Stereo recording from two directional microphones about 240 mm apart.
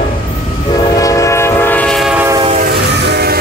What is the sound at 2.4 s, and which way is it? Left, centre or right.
Train, right.